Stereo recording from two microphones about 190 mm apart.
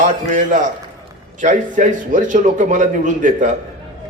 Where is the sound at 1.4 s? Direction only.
40° right (ahead or behind).